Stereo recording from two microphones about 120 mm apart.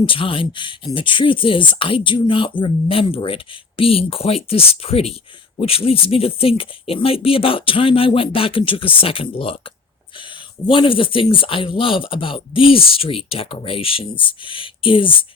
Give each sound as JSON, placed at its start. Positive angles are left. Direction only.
{"t": 0.0, "sound": "speech", "side_deg": 45}
{"t": 10.7, "sound": "speech", "side_deg": 45}